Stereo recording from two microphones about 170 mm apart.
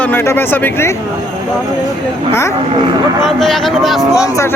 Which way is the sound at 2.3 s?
15° left (ahead or behind).